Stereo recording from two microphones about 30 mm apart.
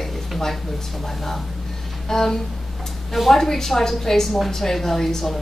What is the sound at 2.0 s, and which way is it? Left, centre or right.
Speech, centre.